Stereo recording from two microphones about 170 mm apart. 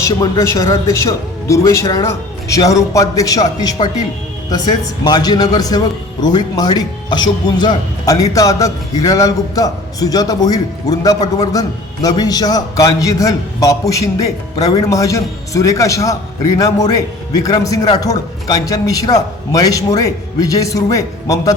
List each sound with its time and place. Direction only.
0.0 s a man's voice: 20° left (ahead or behind)